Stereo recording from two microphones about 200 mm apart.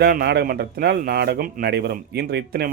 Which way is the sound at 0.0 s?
50° right (ahead or behind).